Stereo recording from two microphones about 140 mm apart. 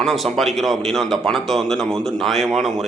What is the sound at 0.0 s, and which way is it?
A man's voice, centre (ahead or behind).